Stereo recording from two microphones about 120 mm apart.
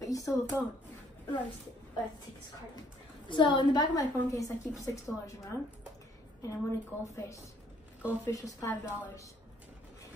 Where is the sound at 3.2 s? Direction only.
40° left (ahead or behind); by 5.6 s 25° left (ahead or behind).